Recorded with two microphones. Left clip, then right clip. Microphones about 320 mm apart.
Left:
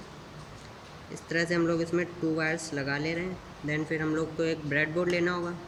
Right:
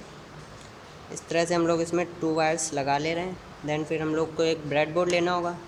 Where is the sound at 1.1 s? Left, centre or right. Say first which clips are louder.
Right 4 dB; centre.